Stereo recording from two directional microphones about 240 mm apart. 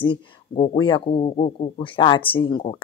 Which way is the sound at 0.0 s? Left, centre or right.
Centre.